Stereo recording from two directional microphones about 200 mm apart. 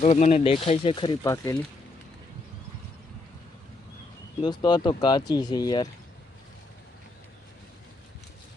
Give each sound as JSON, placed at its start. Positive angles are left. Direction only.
{"t": 0.0, "sound": "speech", "side_deg": 35}
{"t": 4.4, "sound": "speech", "side_deg": 20}